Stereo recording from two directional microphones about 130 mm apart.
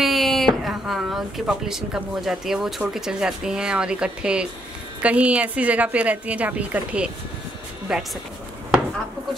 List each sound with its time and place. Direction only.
0.0 s a woman's voice: centre (ahead or behind)